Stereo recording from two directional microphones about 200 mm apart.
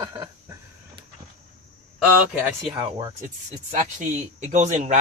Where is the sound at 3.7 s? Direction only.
40° right (ahead or behind).